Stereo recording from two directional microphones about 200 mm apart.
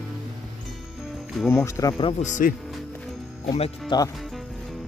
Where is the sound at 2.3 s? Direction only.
40° left (ahead or behind).